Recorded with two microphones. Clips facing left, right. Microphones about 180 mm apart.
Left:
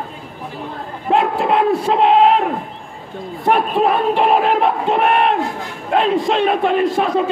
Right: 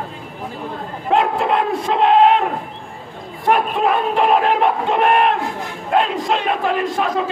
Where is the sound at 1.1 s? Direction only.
Centre (ahead or behind).